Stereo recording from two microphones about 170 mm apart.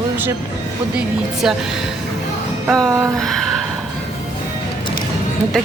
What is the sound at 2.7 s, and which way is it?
Music, 20° right (ahead or behind).